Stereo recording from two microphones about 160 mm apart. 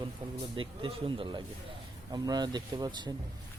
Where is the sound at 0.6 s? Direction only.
35° right (ahead or behind).